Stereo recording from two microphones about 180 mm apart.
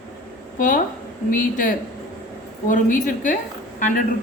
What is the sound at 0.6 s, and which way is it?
A woman's voice, 50° left (ahead or behind).